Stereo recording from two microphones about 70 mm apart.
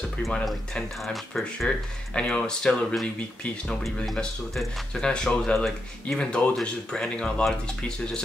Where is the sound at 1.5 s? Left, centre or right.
Centre.